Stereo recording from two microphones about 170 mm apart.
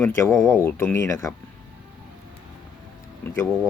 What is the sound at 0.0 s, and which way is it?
Speech, 15° left (ahead or behind).